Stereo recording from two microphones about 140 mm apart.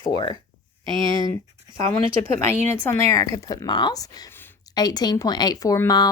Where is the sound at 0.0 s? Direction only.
30° left (ahead or behind).